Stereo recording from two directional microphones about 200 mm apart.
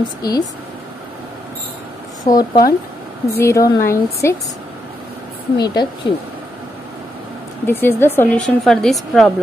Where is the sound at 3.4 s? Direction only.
15° left (ahead or behind).